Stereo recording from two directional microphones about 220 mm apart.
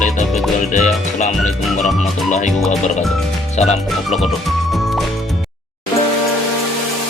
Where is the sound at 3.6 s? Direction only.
30° left (ahead or behind).